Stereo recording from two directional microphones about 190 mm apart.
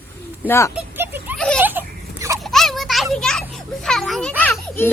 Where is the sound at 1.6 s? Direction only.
10° right (ahead or behind).